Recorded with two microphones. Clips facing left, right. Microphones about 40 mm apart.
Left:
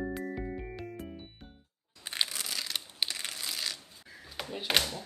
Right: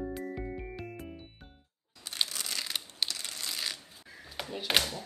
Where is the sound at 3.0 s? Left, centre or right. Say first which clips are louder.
Left 2 dB; centre.